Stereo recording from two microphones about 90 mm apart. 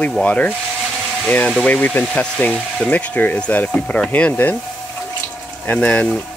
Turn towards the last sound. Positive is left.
turn(degrees=15)  # may be behind; listen again after turning